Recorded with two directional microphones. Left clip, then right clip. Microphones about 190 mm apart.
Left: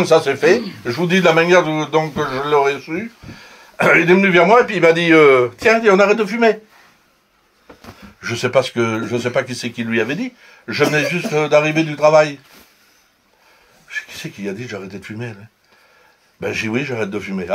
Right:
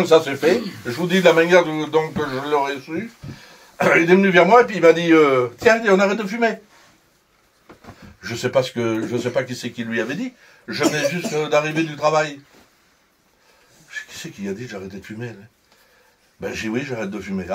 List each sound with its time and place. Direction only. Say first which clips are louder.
0.0 s speech: left 2 dB; 25° left (ahead or behind)
8.2 s speech: left 4 dB; 30° left (ahead or behind)
13.8 s speech: left 5 dB; 25° left (ahead or behind)
16.3 s speech: left 5 dB; 25° left (ahead or behind)